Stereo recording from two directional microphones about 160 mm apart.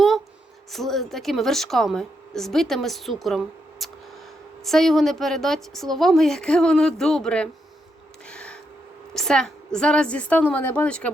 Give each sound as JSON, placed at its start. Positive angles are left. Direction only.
{"t": 0.7, "sound": "a woman's voice", "side_deg": 0}
{"t": 8.3, "sound": "a sound", "side_deg": 5}
{"t": 9.1, "sound": "a woman's voice", "side_deg": 5}